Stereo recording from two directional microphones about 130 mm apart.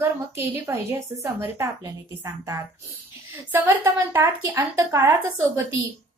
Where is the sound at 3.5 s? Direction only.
20° right (ahead or behind).